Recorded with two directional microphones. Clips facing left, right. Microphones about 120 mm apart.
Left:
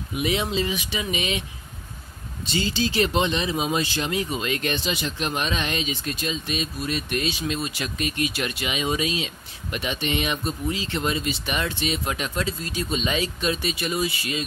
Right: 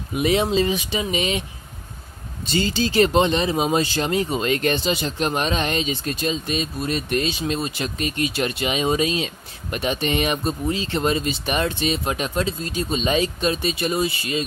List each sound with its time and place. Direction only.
0.2 s speech: 40° right (ahead or behind)
2.5 s speech: 45° right (ahead or behind)
4.1 s speech: 30° right (ahead or behind)
4.5 s speech: 40° right (ahead or behind)
9.1 s speech: 45° right (ahead or behind)